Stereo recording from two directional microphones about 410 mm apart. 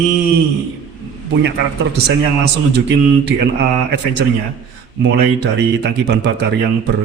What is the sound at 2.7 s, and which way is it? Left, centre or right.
Speech, right.